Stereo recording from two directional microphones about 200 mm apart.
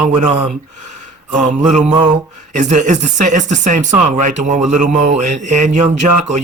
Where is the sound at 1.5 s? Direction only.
35° right (ahead or behind).